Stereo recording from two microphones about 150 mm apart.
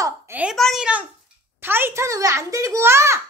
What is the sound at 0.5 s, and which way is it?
A child's voice, centre (ahead or behind).